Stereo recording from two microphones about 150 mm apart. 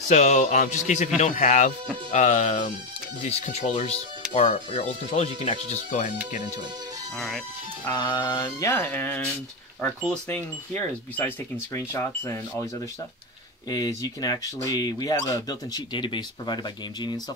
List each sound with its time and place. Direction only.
0.1 s speech: 50° left (ahead or behind)
3.3 s speech: 45° left (ahead or behind)
7.2 s speech: centre (ahead or behind)
7.9 s speech: 25° left (ahead or behind)
13.7 s speech: 25° left (ahead or behind)